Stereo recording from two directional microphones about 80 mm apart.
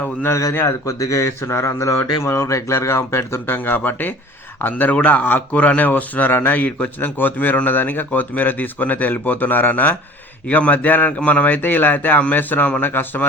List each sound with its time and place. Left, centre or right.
0.0 s speech: left
0.5 s speech: left